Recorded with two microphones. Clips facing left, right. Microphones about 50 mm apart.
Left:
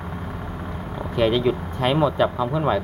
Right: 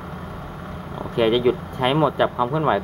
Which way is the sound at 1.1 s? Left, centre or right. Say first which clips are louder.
Right 2 dB; centre.